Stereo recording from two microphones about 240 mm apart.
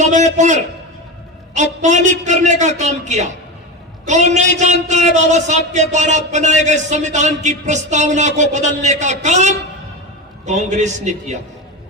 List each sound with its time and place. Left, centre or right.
0.0 s a man's voice: right